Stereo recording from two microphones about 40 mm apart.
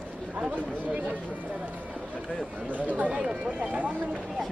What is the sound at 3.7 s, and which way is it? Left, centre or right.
Speech, right.